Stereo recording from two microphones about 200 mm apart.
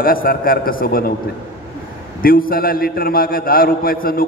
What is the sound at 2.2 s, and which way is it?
A man's voice, 45° left (ahead or behind).